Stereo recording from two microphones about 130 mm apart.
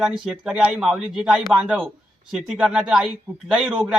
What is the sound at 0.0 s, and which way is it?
Speech, 5° right (ahead or behind).